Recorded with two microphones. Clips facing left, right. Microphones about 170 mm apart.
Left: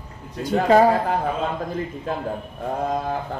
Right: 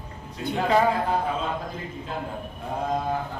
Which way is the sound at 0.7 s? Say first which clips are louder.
Left 6 dB; 45° left (ahead or behind).